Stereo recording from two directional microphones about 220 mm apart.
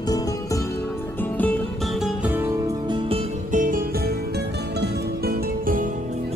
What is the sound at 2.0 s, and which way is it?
Music, 5° right (ahead or behind).